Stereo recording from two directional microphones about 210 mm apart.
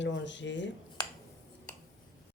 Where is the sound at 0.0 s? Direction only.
60° left (ahead or behind).